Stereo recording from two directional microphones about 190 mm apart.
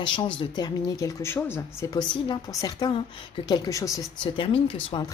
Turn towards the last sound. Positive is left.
turn(degrees=25)  # may be behind; listen again after turning